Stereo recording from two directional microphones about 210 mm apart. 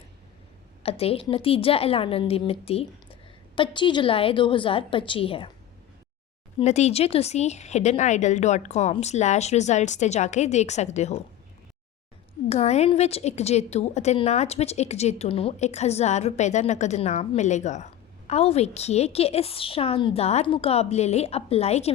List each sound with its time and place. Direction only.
0.8 s a woman's voice: 30° left (ahead or behind)
6.6 s a woman's voice: 30° left (ahead or behind)
12.5 s a woman's voice: 30° left (ahead or behind)